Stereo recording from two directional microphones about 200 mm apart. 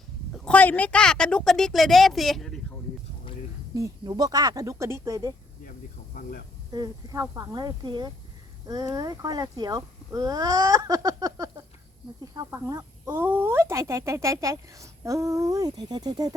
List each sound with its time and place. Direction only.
0.4 s speech: 10° left (ahead or behind)
3.8 s speech: 20° right (ahead or behind)
6.7 s speech: 20° right (ahead or behind)